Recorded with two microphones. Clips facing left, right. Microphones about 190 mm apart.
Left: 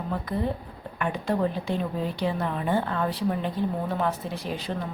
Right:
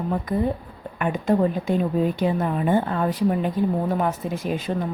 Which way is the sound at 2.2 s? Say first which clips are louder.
Right 5 dB; 20° right (ahead or behind).